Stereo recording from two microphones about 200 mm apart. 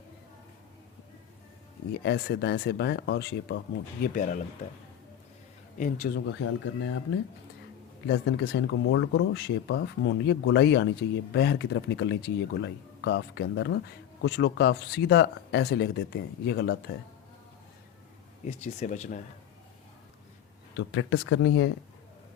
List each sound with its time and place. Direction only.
1.9 s speech: 55° left (ahead or behind)
4.0 s speech: 40° left (ahead or behind)
5.7 s speech: 45° left (ahead or behind)
6.1 s speech: 90° left
8.0 s speech: 65° left (ahead or behind)
18.4 s speech: 35° left (ahead or behind)
20.7 s speech: 90° left